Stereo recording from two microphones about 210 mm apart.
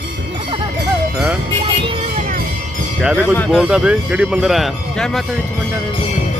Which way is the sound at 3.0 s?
5° right (ahead or behind).